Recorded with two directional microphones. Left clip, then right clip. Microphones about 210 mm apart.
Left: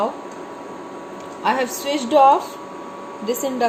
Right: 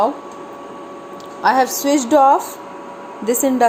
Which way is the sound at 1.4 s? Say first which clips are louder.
Right 6 dB; 25° right (ahead or behind).